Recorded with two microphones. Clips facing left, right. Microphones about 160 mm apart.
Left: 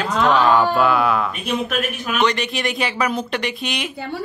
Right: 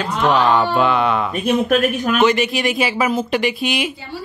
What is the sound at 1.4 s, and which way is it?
Speech, 45° right (ahead or behind).